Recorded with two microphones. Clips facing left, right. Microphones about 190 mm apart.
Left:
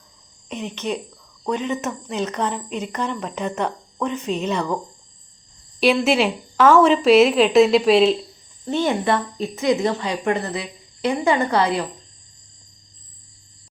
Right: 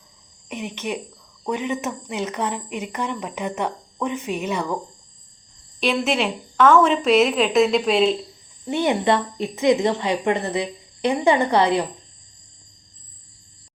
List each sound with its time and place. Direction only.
0.4 s speech: 10° right (ahead or behind)
5.8 s a woman's voice: 5° left (ahead or behind)
8.6 s speech: 15° right (ahead or behind)